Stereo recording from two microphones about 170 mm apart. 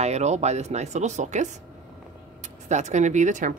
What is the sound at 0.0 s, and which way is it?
Speech, 40° right (ahead or behind).